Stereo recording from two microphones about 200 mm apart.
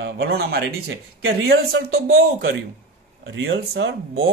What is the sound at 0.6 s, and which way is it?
A man's voice, 70° right (ahead or behind).